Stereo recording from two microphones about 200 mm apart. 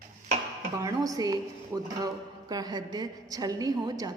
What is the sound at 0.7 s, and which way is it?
A woman's voice, 15° right (ahead or behind).